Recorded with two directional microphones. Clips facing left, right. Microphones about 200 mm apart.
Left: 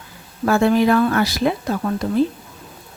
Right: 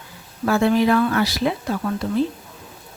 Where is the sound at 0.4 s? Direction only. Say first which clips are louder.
Left 2 dB; 50° left (ahead or behind).